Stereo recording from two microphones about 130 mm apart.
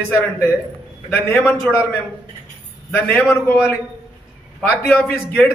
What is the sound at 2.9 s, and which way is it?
Speech, 15° left (ahead or behind).